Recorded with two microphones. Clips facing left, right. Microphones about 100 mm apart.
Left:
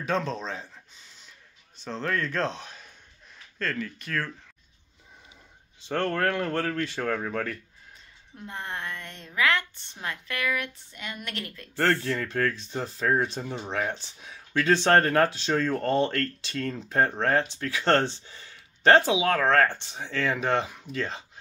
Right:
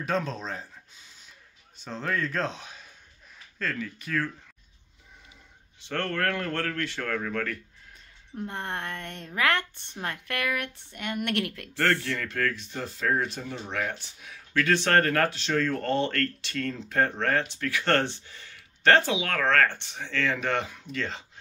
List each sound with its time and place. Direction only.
0.0 s speech: 5° right (ahead or behind)
1.9 s speech: 5° right (ahead or behind)
5.9 s speech: 15° left (ahead or behind)
8.4 s a woman's voice: 55° right (ahead or behind); by 11.7 s 70° right (ahead or behind)
12.1 s speech: 25° left (ahead or behind)